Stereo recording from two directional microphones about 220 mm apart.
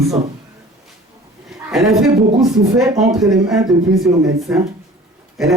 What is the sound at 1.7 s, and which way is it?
Speech, centre (ahead or behind).